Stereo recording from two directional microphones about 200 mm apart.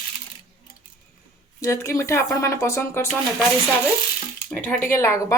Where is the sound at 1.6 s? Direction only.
15° left (ahead or behind).